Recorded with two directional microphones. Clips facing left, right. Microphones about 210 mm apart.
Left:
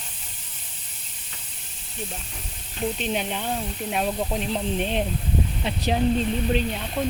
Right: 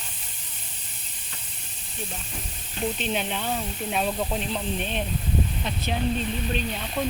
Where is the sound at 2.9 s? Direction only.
10° left (ahead or behind).